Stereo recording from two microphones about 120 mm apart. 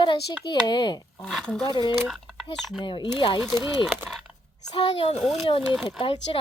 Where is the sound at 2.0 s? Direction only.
Centre (ahead or behind).